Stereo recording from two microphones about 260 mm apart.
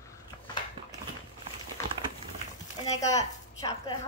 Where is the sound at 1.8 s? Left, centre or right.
Centre.